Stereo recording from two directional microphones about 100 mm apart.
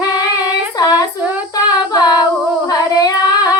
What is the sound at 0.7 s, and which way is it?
Female singing, 40° left (ahead or behind).